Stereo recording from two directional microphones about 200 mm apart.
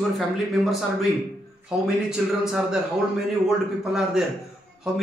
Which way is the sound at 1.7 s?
5° right (ahead or behind).